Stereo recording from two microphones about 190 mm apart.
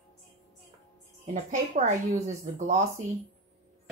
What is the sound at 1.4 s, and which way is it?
Speech, 40° right (ahead or behind).